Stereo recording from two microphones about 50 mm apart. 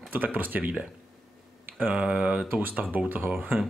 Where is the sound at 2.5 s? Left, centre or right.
Right.